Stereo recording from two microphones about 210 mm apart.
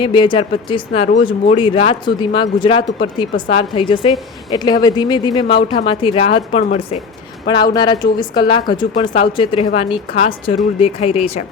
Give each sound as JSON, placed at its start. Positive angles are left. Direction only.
{"t": 0.0, "sound": "speech", "side_deg": 20}
{"t": 7.7, "sound": "speech", "side_deg": 20}